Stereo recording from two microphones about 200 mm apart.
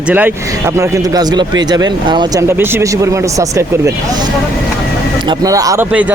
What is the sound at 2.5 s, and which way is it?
Speech, 10° right (ahead or behind).